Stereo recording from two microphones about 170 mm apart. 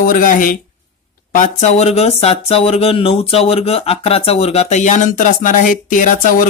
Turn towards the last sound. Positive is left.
turn(degrees=50)  # may be behind; listen again after turning